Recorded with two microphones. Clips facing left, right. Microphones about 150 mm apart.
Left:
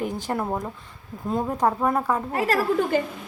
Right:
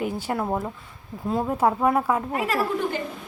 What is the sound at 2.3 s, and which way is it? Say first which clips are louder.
Speech: left 2 dB; 40° left (ahead or behind).